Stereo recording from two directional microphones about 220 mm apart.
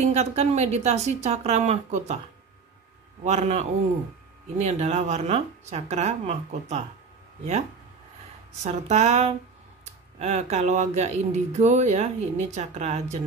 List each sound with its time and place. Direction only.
0.0 s speech: 30° right (ahead or behind)
3.3 s speech: 30° right (ahead or behind)
8.6 s speech: 30° right (ahead or behind)